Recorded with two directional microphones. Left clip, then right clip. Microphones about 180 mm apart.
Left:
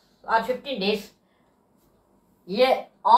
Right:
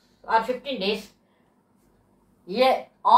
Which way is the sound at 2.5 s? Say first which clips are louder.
Even; 10° left (ahead or behind).